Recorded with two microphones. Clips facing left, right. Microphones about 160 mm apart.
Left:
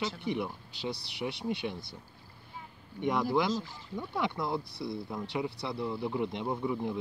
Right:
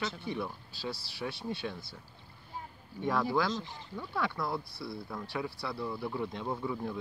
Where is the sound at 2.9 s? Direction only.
20° left (ahead or behind).